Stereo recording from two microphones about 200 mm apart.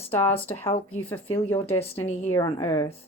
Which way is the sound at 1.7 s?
30° left (ahead or behind).